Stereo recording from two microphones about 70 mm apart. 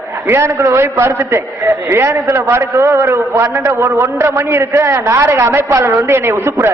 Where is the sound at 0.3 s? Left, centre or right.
Right.